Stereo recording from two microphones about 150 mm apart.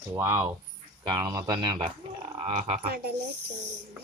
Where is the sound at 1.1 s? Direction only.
25° right (ahead or behind).